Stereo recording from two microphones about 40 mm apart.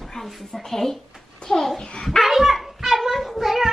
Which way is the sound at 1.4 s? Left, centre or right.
Left.